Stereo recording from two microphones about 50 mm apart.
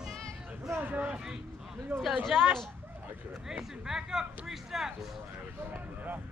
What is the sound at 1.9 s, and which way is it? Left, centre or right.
Speech, right.